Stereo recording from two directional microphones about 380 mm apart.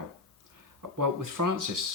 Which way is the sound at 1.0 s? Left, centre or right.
Right.